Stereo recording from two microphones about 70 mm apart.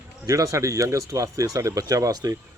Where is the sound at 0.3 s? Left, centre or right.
Right.